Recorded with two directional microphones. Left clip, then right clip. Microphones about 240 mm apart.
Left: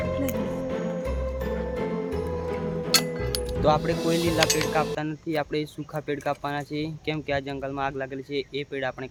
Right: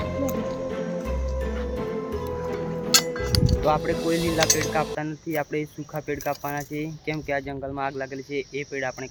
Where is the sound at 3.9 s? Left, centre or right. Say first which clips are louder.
Even; centre.